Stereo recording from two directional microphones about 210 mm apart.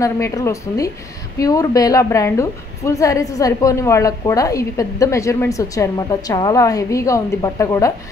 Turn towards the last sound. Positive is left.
turn(degrees=15)  # may be behind; listen again after turning